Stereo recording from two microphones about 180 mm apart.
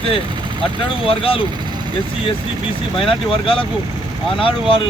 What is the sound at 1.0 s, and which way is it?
Speech, 30° left (ahead or behind).